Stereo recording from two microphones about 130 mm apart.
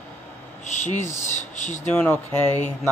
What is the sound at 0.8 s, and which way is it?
Speech, 65° left (ahead or behind).